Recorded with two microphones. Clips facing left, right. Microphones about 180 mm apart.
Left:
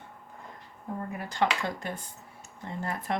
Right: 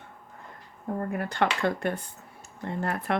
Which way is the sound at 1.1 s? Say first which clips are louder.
Even; 60° right (ahead or behind).